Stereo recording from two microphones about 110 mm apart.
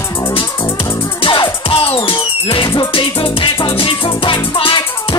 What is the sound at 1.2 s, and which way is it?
Music, 50° left (ahead or behind).